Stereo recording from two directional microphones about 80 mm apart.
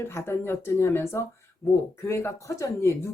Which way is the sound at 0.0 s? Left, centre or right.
Left.